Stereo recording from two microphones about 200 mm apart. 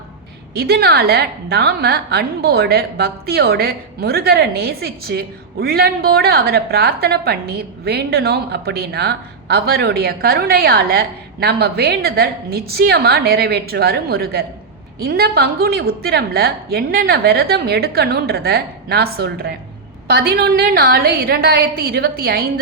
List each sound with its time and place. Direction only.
0.5 s a woman's voice: 50° right (ahead or behind)